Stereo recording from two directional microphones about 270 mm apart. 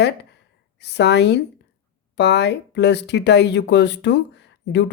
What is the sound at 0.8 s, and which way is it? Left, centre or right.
Speech, left.